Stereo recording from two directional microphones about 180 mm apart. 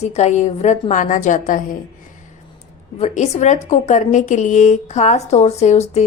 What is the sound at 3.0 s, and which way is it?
A woman's voice, 40° left (ahead or behind).